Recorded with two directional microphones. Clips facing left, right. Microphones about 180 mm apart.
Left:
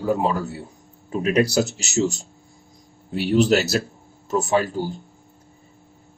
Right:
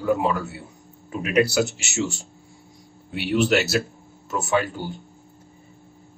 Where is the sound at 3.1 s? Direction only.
35° left (ahead or behind).